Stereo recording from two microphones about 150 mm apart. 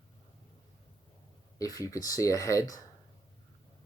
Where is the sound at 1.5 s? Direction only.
25° left (ahead or behind).